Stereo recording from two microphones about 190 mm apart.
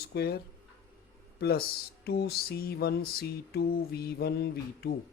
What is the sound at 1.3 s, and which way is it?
Speech, 55° left (ahead or behind).